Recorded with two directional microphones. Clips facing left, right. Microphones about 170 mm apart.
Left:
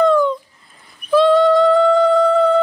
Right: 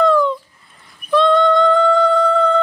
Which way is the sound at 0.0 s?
Centre (ahead or behind).